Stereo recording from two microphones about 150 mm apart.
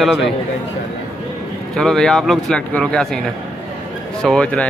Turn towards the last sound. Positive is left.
turn(degrees=5)  # may be behind; listen again after turning